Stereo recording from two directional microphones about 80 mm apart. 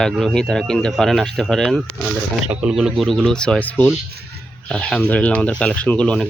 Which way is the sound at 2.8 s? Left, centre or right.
Centre.